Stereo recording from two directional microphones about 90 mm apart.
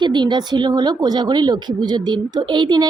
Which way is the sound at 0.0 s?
55° right (ahead or behind).